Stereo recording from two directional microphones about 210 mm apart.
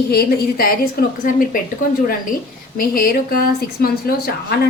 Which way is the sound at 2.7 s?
45° left (ahead or behind).